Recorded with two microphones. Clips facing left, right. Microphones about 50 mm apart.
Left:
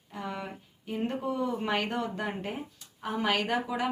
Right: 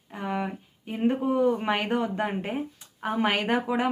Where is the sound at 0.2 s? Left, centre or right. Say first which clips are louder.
Right 7 dB; right.